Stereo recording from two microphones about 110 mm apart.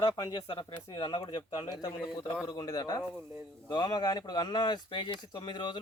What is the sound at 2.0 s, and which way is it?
Speech, centre (ahead or behind).